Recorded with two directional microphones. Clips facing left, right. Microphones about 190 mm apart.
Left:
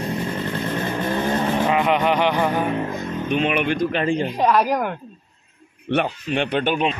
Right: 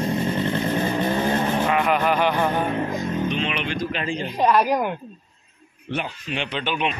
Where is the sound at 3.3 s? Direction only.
50° left (ahead or behind).